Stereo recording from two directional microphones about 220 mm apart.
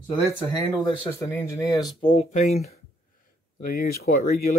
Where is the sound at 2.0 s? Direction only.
25° left (ahead or behind).